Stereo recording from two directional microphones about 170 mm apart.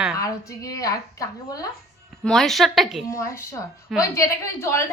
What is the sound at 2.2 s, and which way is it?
Speech, centre (ahead or behind).